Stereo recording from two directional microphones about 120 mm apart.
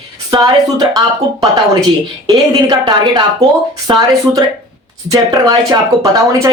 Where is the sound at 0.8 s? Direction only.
30° right (ahead or behind).